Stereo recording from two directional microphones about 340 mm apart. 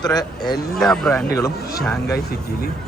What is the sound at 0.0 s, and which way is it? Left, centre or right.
Speech, centre.